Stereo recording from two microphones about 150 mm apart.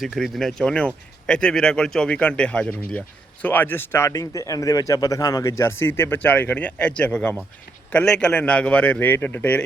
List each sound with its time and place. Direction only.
0.0 s a man's voice: centre (ahead or behind)